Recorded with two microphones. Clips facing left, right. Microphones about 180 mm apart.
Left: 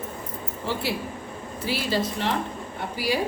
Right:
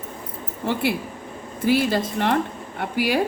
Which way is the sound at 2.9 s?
65° right (ahead or behind).